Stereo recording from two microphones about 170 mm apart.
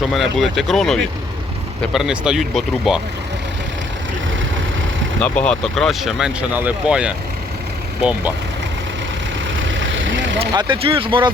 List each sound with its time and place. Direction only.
0.1 s speech: centre (ahead or behind)
5.2 s speech: 5° left (ahead or behind)
9.6 s vehicle: 90° right
10.5 s speech: 25° right (ahead or behind)